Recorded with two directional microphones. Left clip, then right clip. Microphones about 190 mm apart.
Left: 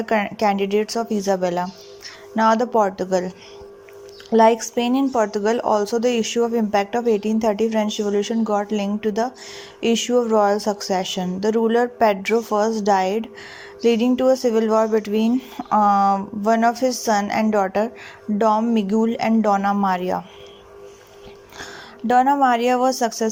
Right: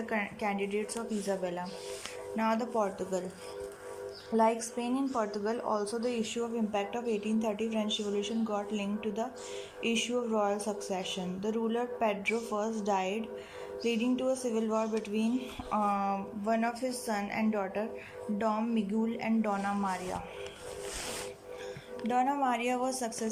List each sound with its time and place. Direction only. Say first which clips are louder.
0.0 s speech: left 14 dB; 45° left (ahead or behind)
4.4 s speech: left 13 dB; 45° left (ahead or behind)
22.1 s speech: left 14 dB; 45° left (ahead or behind)